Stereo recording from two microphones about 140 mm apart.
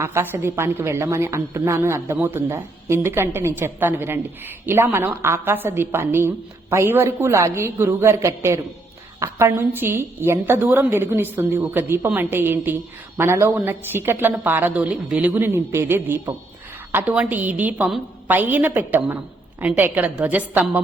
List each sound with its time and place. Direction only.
0.0 s a woman's voice: 15° right (ahead or behind)